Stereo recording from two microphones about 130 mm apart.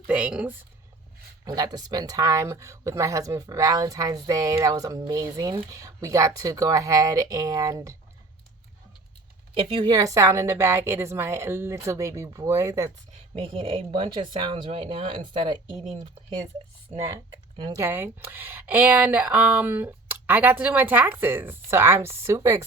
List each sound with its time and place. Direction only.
0.1 s speech: 10° right (ahead or behind)
1.5 s speech: 30° right (ahead or behind)
9.6 s speech: 40° right (ahead or behind); by 12.9 s 25° right (ahead or behind)
13.3 s speech: 45° right (ahead or behind)
16.9 s speech: 60° right (ahead or behind)
17.7 s speech: 15° right (ahead or behind)